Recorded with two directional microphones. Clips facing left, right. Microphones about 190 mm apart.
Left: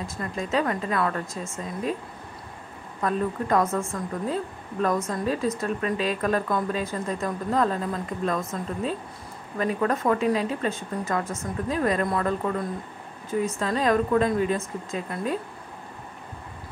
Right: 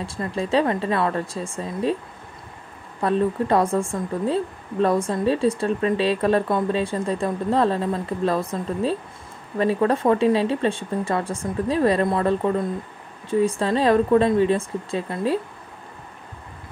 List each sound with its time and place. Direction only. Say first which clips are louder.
0.0 s speech: right 4 dB; 30° right (ahead or behind)
3.0 s speech: right 5 dB; 30° right (ahead or behind)